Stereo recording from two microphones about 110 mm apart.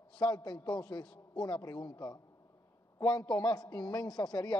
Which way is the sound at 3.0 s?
10° left (ahead or behind).